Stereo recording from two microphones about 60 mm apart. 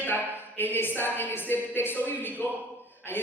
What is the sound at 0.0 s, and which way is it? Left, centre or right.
A woman's voice, left.